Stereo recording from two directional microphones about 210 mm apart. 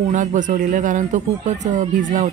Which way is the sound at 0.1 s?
35° right (ahead or behind).